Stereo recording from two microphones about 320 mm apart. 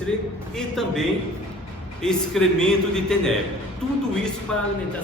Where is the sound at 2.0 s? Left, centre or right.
Centre.